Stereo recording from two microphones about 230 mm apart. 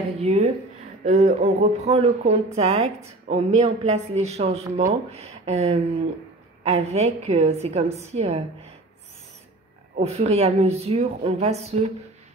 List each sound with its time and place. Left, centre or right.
0.2 s a woman's voice: right
9.9 s a woman's voice: right